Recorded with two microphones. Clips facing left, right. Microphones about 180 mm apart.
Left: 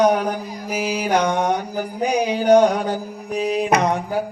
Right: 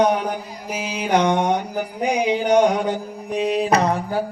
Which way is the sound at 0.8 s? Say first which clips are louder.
Even; 25° right (ahead or behind).